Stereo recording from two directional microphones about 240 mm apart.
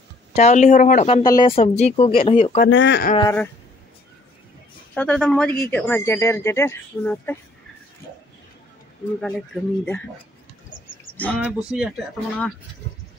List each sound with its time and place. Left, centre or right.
0.3 s speech: left
2.6 s speech: left
3.2 s a man's voice: centre
4.9 s a man's voice: centre
9.2 s speech: centre
11.1 s speech: centre
11.4 s speech: centre